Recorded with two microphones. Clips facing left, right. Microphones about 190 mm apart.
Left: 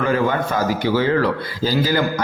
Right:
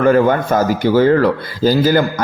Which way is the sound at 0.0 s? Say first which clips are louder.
Right 7 dB; 45° right (ahead or behind).